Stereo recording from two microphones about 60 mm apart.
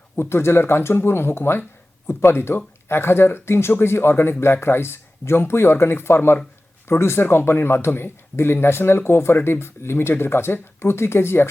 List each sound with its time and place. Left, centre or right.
0.2 s speech: left